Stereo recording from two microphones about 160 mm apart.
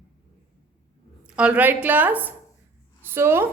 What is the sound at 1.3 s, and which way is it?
A woman's voice, 5° right (ahead or behind).